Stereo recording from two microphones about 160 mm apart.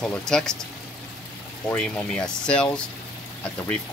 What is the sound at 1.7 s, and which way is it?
Speech, 5° left (ahead or behind).